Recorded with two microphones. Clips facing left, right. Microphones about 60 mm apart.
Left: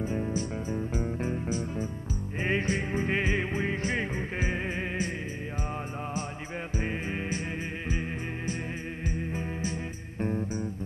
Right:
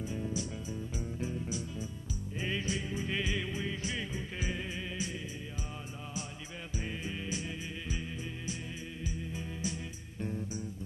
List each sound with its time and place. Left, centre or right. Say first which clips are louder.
0.0 s music: left 6 dB; left
6.8 s music: left 6 dB; left
9.0 s music: left 7 dB; left